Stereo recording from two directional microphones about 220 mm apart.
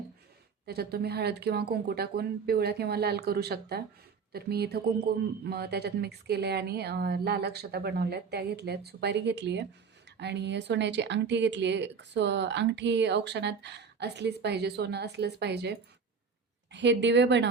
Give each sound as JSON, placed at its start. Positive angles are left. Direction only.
{"t": 0.7, "sound": "speech", "side_deg": -45}